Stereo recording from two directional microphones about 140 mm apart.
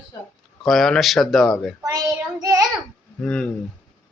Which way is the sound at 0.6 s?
Centre (ahead or behind).